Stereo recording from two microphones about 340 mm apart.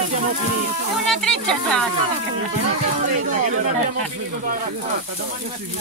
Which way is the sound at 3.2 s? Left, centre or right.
Right.